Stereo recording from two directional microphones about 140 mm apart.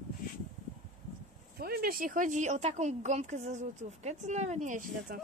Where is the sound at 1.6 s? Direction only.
90° right; by 5.2 s 75° right (ahead or behind).